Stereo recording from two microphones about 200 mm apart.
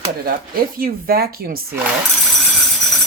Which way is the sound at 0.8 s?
50° right (ahead or behind).